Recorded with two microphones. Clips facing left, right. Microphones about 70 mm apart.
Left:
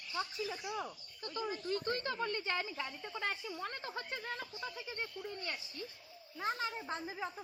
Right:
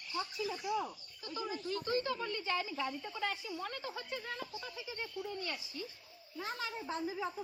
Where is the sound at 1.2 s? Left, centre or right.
Left.